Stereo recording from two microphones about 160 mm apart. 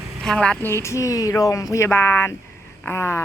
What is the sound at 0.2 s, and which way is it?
Speech, 5° left (ahead or behind).